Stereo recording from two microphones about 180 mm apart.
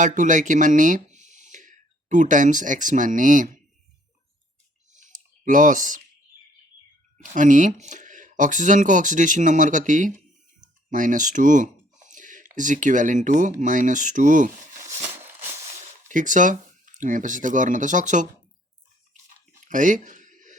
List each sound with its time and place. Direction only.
0.0 s speech: 45° right (ahead or behind)
4.9 s clicking: 45° right (ahead or behind)
7.2 s speech: 45° right (ahead or behind)
14.8 s a sound: 15° right (ahead or behind)
16.0 s speech: 45° right (ahead or behind)
19.6 s a sound: 45° right (ahead or behind)